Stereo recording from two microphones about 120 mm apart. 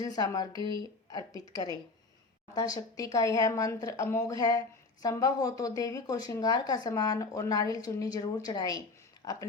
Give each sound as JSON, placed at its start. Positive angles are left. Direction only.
{"t": 0.0, "sound": "a woman's voice", "side_deg": 30}